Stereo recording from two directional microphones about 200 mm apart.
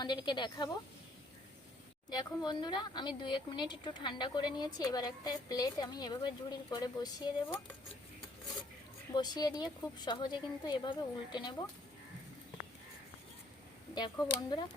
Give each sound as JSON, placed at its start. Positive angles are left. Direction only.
{"t": 0.0, "sound": "a woman's voice", "side_deg": 20}
{"t": 2.1, "sound": "a woman's voice", "side_deg": 20}
{"t": 9.1, "sound": "a woman's voice", "side_deg": 20}
{"t": 13.9, "sound": "a woman's voice", "side_deg": 20}